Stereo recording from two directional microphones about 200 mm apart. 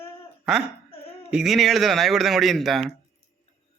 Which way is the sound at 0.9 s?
30° left (ahead or behind).